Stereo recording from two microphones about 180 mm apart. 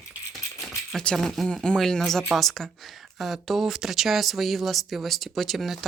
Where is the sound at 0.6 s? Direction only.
5° left (ahead or behind).